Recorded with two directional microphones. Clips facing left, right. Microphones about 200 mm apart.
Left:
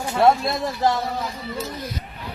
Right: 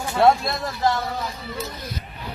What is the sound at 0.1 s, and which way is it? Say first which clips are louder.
Speech: even; centre (ahead or behind).